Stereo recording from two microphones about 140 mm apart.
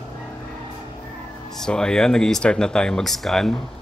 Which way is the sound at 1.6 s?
5° left (ahead or behind).